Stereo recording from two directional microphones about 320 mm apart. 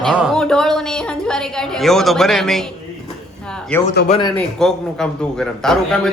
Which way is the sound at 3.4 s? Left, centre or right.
Centre.